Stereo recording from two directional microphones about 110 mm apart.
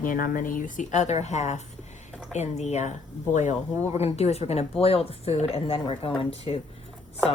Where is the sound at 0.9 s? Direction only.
90° left; by 6.5 s 60° left (ahead or behind).